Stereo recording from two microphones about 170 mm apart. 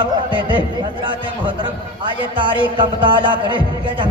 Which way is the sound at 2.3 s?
30° right (ahead or behind).